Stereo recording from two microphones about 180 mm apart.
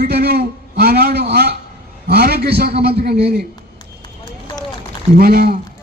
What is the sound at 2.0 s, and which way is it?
A man's voice, 60° right (ahead or behind).